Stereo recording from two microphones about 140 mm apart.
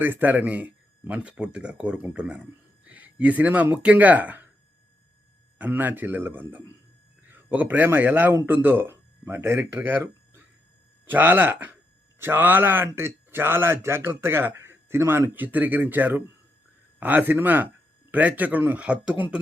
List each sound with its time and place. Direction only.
0.0 s speech: 15° right (ahead or behind)
5.5 s speech: 10° right (ahead or behind)